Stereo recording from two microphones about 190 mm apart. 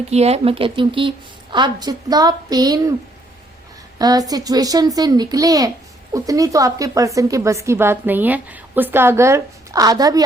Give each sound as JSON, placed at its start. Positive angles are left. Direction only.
{"t": 0.1, "sound": "a woman's voice", "side_deg": -35}
{"t": 3.9, "sound": "a woman's voice", "side_deg": -20}